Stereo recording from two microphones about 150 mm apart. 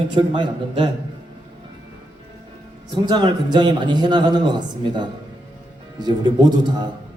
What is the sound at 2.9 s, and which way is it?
A man's voice, 30° right (ahead or behind).